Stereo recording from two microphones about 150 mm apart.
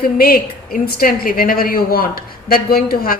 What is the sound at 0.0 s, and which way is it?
A woman's voice, 80° left.